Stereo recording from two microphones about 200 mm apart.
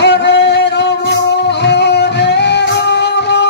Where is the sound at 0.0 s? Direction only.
60° left (ahead or behind).